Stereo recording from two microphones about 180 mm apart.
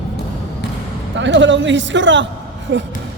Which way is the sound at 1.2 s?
90° right.